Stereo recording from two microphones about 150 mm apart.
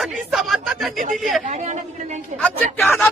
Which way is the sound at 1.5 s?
50° right (ahead or behind).